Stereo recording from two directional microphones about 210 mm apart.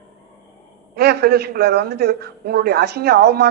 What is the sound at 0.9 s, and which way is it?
A man's voice, 50° right (ahead or behind).